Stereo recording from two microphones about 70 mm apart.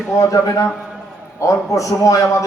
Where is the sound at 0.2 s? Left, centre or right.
Left.